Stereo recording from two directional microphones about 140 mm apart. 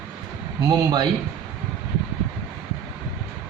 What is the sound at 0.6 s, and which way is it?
Speech, 30° right (ahead or behind).